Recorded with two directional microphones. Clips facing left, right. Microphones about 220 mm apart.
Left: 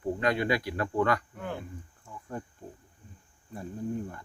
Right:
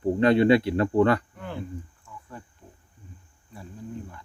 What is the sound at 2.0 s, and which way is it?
Cricket, 45° left (ahead or behind).